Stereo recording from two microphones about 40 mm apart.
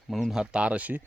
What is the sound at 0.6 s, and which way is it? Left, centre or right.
Speech, right.